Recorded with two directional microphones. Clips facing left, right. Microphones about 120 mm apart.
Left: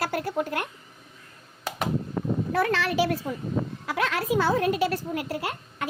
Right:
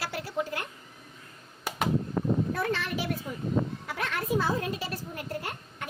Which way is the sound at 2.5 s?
90° left.